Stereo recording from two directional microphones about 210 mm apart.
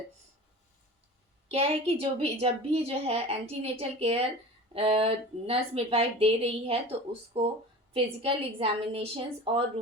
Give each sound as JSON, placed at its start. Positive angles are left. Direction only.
{"t": 1.5, "sound": "speech", "side_deg": -30}